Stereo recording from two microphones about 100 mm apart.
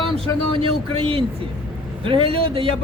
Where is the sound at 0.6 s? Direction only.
70° right (ahead or behind).